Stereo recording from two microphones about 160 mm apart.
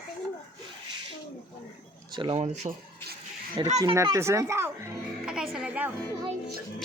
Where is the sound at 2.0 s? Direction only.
30° right (ahead or behind).